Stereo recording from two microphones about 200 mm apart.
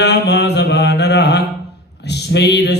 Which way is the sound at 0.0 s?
55° left (ahead or behind).